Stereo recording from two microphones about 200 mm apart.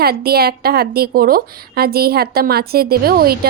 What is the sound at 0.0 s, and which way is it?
A woman's voice, 50° right (ahead or behind).